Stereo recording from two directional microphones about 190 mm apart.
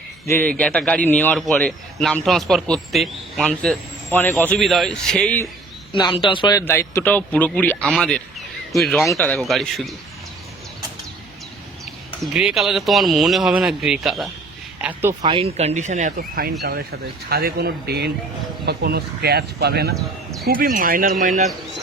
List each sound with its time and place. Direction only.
0.3 s a man's voice: 10° left (ahead or behind)
5.9 s a man's voice: 25° left (ahead or behind); by 9.0 s centre (ahead or behind)
9.0 s a man's voice: 10° left (ahead or behind)
12.2 s a man's voice: 5° right (ahead or behind)
15.2 s speech: 30° right (ahead or behind)